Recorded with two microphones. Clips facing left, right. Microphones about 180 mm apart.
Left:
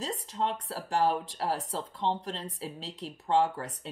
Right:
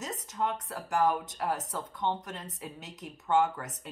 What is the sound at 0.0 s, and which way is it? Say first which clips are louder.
Speech: left 1 dB; 30° left (ahead or behind).